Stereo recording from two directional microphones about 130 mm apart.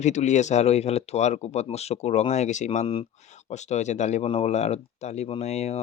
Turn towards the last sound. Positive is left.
turn(degrees=55)  # may be behind; listen again after turning